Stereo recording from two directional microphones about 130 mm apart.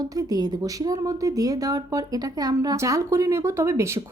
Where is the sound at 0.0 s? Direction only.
30° right (ahead or behind).